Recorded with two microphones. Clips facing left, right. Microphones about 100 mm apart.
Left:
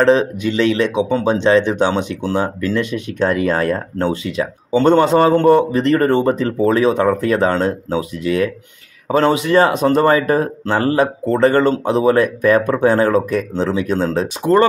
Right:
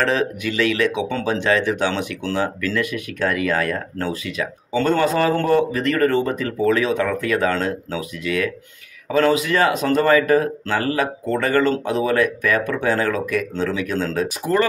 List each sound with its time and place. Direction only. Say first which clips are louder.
0.0 s speech: left 7 dB; 25° left (ahead or behind)